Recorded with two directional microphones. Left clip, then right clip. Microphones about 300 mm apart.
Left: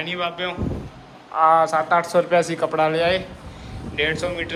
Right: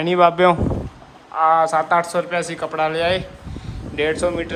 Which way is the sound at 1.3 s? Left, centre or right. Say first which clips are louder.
Right 1 dB; centre.